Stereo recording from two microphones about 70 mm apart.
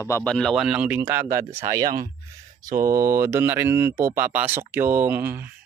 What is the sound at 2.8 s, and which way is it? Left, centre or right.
Speech, right.